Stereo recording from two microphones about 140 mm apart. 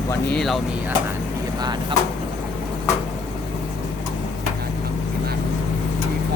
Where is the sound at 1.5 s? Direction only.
30° right (ahead or behind).